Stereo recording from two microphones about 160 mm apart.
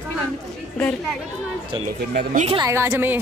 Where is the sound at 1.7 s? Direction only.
30° right (ahead or behind).